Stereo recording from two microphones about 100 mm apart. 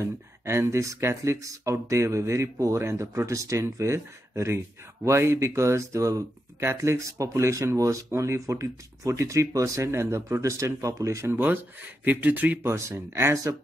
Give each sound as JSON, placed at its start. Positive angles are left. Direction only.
{"t": 0.0, "sound": "speech", "side_deg": -25}
{"t": 11.3, "sound": "speech", "side_deg": -20}